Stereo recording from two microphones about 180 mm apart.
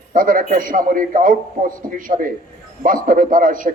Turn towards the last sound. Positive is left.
turn(degrees=-50)  # may be behind; listen again after turning